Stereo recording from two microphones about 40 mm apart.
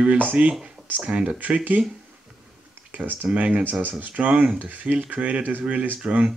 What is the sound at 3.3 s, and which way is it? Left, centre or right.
Speech, right.